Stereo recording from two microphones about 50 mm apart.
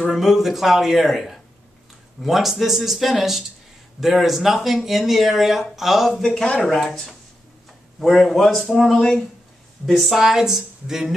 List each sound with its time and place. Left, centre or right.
0.1 s speech: centre
6.4 s speech: left
6.7 s speech: centre
9.8 s speech: centre